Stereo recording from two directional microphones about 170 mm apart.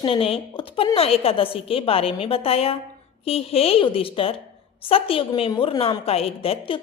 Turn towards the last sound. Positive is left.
turn(degrees=30)  # may be behind; listen again after turning